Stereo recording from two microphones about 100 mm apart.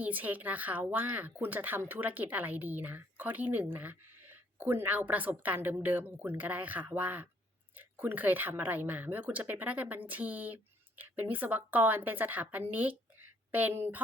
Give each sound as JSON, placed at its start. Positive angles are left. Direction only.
{"t": 0.0, "sound": "speech", "side_deg": -15}